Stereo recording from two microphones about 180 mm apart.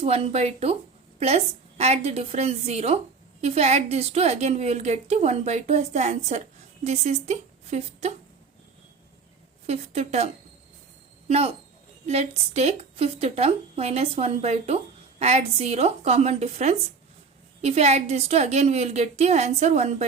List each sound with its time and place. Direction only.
0.0 s a woman's voice: 35° right (ahead or behind)
1.8 s a woman's voice: 40° right (ahead or behind)
9.6 s a woman's voice: 35° right (ahead or behind)
11.3 s a woman's voice: 35° right (ahead or behind)